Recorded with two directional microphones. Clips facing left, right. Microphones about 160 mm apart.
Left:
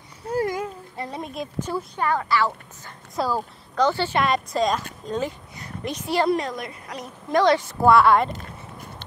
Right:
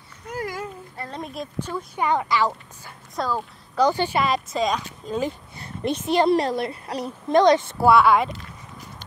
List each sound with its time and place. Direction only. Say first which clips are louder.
0.2 s a sound: left 6 dB; 30° left (ahead or behind)
0.6 s a sound: left 3 dB; 15° left (ahead or behind)
1.2 s speech: right 1 dB; centre (ahead or behind)
2.0 s a woman's voice: right 2 dB; 15° right (ahead or behind)
3.2 s a woman's voice: left 1 dB; 10° left (ahead or behind)
3.7 s a woman's voice: right 1 dB; 15° right (ahead or behind)
4.2 s speech: left 1 dB; centre (ahead or behind)
5.6 s a child's voice: right 4 dB; 30° right (ahead or behind)
7.7 s speech: even; 5° right (ahead or behind)